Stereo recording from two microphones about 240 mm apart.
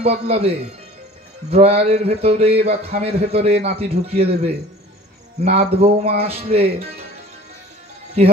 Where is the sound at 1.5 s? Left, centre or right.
Right.